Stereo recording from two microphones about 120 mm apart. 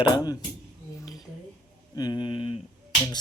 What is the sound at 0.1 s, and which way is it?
Speech, 35° left (ahead or behind).